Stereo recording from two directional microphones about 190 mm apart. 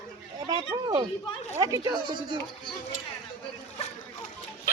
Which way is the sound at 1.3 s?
30° left (ahead or behind).